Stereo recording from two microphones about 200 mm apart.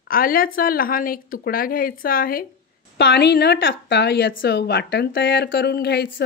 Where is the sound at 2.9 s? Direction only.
55° left (ahead or behind).